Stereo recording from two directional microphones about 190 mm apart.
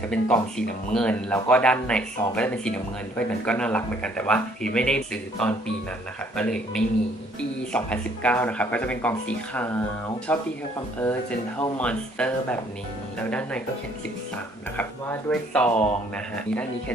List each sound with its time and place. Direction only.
0.1 s speech: 5° left (ahead or behind)
14.8 s speech: 10° left (ahead or behind)